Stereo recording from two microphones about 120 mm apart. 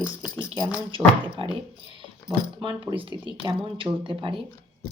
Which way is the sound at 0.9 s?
45° right (ahead or behind).